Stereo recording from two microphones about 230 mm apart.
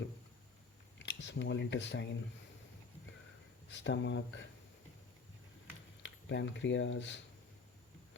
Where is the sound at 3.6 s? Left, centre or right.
Left.